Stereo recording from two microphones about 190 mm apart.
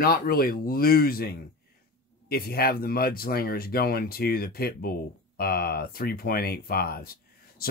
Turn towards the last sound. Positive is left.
turn(degrees=50)  # may be behind; listen again after turning